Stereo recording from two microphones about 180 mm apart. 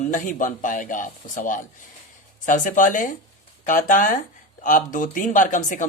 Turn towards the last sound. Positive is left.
turn(degrees=45)  # may be behind; listen again after turning